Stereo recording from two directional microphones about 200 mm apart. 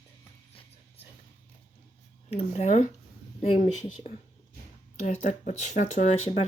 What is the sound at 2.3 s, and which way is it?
Speech, 35° left (ahead or behind).